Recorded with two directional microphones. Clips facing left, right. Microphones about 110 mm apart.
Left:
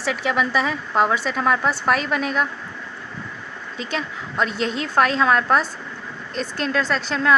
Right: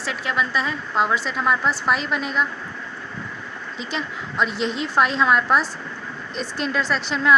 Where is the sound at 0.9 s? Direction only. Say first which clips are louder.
Left 2 dB; 50° left (ahead or behind).